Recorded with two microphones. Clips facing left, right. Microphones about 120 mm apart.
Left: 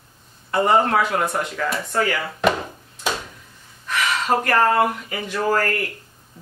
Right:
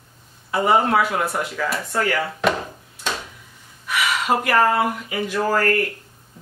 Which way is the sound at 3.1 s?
10° left (ahead or behind).